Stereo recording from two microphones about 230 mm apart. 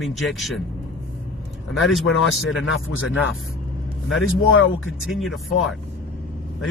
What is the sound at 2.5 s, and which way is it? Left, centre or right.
Speech, left.